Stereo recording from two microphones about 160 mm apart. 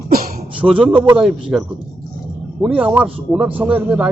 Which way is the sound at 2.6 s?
5° right (ahead or behind).